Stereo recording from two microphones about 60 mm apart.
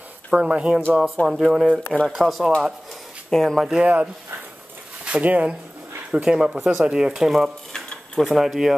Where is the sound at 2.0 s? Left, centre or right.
Centre.